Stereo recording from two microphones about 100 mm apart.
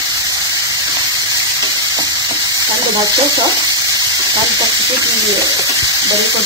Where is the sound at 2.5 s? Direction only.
40° right (ahead or behind).